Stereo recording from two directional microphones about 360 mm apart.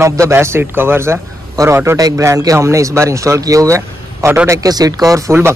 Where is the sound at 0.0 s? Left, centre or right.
Centre.